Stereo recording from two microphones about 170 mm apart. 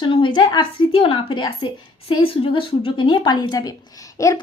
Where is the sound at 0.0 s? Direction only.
30° left (ahead or behind).